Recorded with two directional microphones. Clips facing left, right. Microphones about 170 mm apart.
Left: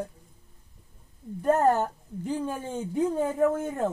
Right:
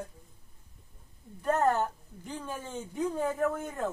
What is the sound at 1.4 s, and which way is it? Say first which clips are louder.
Speech: left 4 dB; 35° left (ahead or behind).